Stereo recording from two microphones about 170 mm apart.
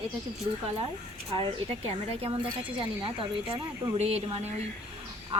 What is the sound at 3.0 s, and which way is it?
Speech, 30° right (ahead or behind).